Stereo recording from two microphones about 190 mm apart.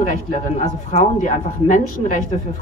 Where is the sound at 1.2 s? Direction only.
40° left (ahead or behind).